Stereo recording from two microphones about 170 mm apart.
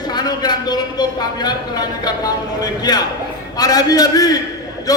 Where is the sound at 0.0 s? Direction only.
25° left (ahead or behind).